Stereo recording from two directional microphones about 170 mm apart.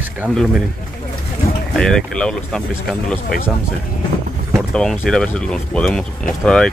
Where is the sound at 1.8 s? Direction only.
5° left (ahead or behind).